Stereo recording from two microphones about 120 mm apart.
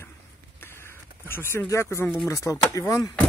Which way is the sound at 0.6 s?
20° left (ahead or behind).